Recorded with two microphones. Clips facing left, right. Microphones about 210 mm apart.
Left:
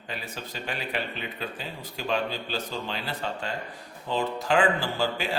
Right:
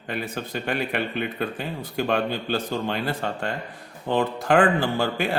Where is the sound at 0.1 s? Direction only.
55° right (ahead or behind).